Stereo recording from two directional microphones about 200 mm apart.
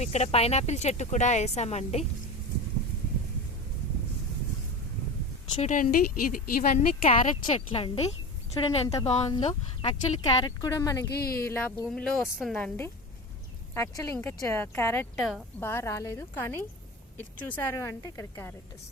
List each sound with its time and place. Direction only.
0.0 s speech: 35° left (ahead or behind)
5.5 s speech: 40° left (ahead or behind)
7.0 s speech: 30° left (ahead or behind)
9.0 s speech: 30° left (ahead or behind)
11.1 s speech: 50° left (ahead or behind)
11.4 s speech: 10° left (ahead or behind)
11.9 s a woman's voice: centre (ahead or behind)
15.1 s a woman's voice: centre (ahead or behind)
15.6 s speech: 15° left (ahead or behind)